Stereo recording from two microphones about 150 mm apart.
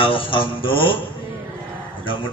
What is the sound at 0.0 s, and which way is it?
A man's voice, 35° left (ahead or behind).